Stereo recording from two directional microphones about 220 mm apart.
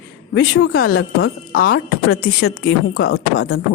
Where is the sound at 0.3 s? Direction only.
55° left (ahead or behind).